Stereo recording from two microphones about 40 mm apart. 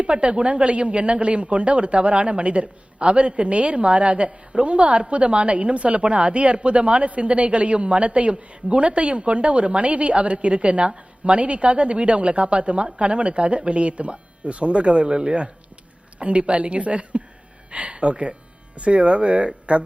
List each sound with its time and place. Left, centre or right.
0.0 s speech: right